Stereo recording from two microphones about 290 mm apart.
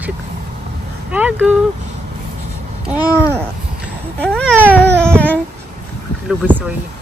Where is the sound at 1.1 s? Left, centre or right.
Centre.